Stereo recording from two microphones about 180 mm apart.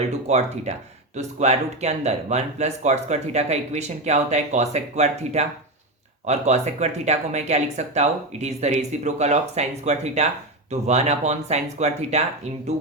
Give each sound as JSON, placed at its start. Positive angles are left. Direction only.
{"t": 0.1, "sound": "speech", "side_deg": -35}